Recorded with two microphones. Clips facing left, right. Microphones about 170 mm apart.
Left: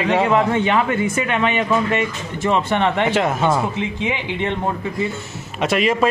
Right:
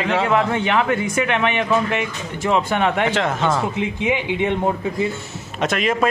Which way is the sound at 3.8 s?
10° right (ahead or behind).